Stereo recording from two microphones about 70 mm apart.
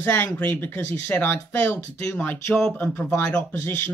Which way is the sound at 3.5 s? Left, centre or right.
Left.